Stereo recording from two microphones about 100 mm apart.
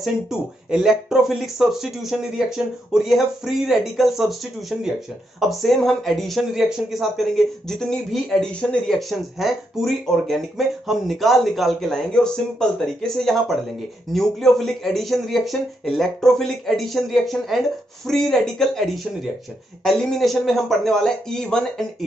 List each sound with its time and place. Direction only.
0.0 s speech: 5° right (ahead or behind)